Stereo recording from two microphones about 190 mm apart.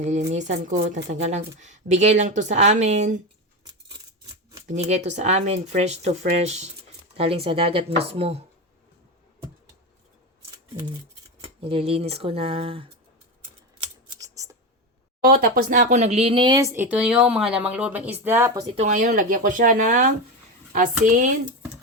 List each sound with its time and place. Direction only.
0.0 s speech: 40° right (ahead or behind)
4.7 s speech: 35° right (ahead or behind)
11.4 s speech: 30° right (ahead or behind)
13.8 s scissors: 15° right (ahead or behind)
15.2 s speech: 45° right (ahead or behind); by 16.6 s 25° right (ahead or behind)
16.9 s speech: 5° right (ahead or behind)
18.8 s speech: 40° right (ahead or behind)